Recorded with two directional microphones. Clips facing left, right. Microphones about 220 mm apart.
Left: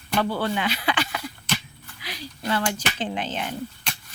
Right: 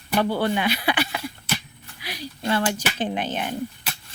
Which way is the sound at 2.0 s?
10° right (ahead or behind).